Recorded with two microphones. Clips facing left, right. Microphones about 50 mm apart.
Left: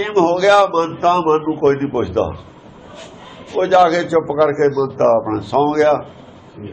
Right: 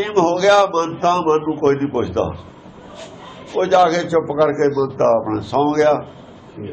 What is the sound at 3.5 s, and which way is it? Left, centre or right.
A man's voice, centre.